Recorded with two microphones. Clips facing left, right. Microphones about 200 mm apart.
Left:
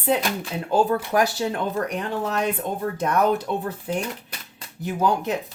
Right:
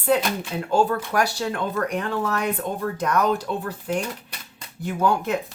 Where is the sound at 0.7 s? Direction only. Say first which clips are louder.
Left 1 dB; 20° left (ahead or behind).